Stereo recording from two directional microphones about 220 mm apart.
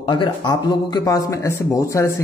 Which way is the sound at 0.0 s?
20° left (ahead or behind).